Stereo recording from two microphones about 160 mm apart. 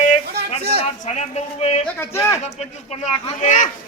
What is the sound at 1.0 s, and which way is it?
Speech, 40° left (ahead or behind).